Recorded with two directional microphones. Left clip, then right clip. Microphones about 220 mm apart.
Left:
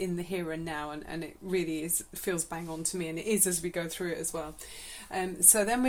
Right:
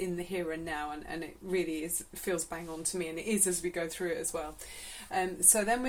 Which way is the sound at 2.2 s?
35° left (ahead or behind).